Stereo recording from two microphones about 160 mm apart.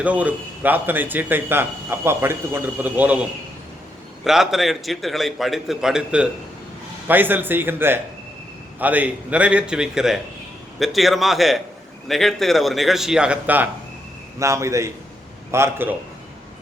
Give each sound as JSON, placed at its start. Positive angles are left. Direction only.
{"t": 0.0, "sound": "a man's voice", "side_deg": -10}